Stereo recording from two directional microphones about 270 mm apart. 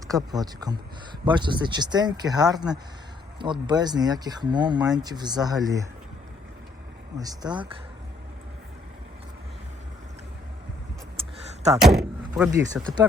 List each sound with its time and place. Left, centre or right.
0.1 s speech: centre
7.2 s speech: centre
11.2 s a sound: right
11.8 s speech: centre